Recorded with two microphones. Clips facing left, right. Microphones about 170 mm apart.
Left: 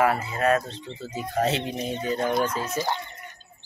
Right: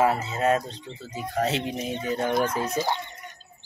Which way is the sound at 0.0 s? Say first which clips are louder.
Even; 20° right (ahead or behind).